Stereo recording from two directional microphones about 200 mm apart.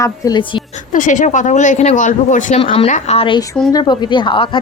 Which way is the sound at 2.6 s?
25° left (ahead or behind).